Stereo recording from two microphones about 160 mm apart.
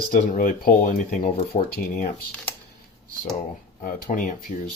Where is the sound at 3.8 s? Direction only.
60° left (ahead or behind).